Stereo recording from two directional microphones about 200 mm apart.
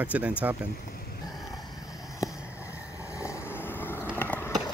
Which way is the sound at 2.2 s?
15° left (ahead or behind).